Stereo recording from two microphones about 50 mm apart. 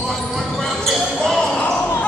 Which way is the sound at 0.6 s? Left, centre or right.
Centre.